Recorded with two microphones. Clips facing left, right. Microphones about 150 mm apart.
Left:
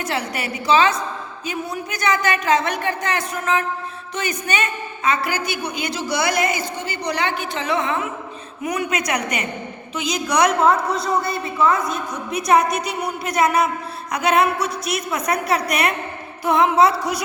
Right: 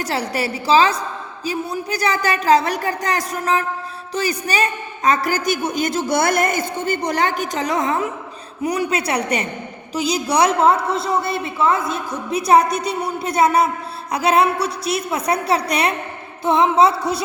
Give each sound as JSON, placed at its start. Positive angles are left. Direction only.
{"t": 0.0, "sound": "a woman's voice", "side_deg": -35}